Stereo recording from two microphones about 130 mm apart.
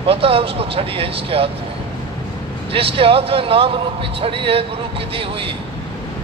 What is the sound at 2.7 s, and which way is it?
A man's voice, 45° right (ahead or behind).